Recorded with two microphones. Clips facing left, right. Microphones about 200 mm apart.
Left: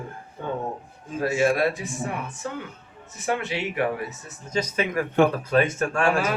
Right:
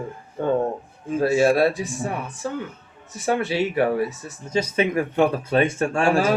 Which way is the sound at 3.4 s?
35° right (ahead or behind).